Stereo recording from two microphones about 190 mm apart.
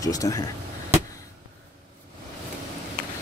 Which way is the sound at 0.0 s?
20° left (ahead or behind).